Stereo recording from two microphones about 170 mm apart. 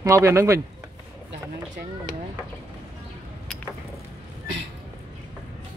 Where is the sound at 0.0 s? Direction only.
15° right (ahead or behind).